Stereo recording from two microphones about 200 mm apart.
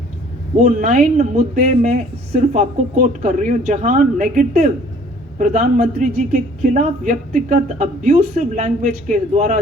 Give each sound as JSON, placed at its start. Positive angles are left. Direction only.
{"t": 0.6, "sound": "a man's voice", "side_deg": -40}